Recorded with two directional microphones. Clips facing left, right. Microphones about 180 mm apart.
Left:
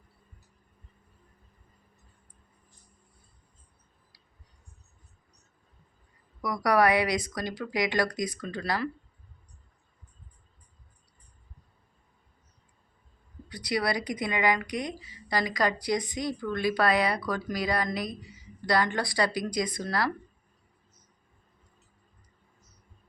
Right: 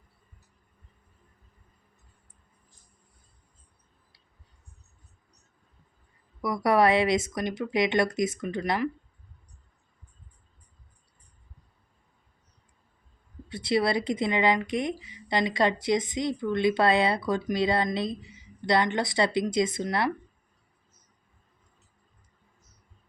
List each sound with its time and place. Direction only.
6.4 s speech: 25° right (ahead or behind)
13.5 s speech: 25° right (ahead or behind)